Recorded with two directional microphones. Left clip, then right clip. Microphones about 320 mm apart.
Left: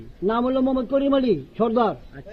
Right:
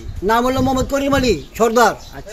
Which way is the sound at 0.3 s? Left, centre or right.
Right.